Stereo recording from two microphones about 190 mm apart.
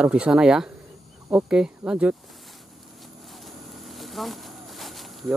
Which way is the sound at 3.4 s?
Centre (ahead or behind).